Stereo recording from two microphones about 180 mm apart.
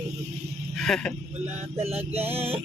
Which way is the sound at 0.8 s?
5° left (ahead or behind).